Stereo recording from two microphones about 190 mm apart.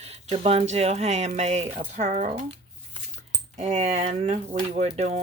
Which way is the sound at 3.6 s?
35° right (ahead or behind).